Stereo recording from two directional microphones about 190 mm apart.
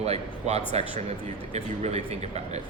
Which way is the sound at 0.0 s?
35° right (ahead or behind).